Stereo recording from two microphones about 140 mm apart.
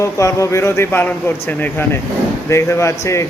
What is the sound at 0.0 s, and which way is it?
Speech, 20° left (ahead or behind).